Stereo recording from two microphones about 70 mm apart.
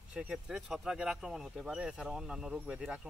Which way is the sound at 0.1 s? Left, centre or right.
Centre.